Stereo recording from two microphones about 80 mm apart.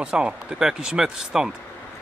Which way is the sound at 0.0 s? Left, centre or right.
Centre.